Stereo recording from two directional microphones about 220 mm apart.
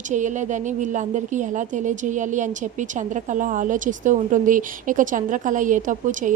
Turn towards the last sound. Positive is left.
turn(degrees=-35)  # may be behind; listen again after turning